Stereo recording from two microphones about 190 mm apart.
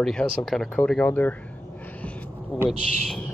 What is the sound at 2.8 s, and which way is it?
Speech, 50° left (ahead or behind).